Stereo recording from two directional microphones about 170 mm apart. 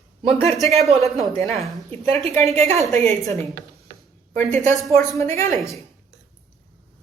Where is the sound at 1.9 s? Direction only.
35° right (ahead or behind).